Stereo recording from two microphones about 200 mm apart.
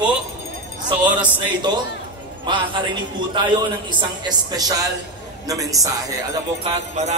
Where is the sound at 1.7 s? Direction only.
20° right (ahead or behind).